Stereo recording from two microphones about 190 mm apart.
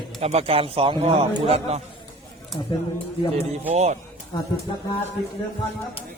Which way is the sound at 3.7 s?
35° right (ahead or behind).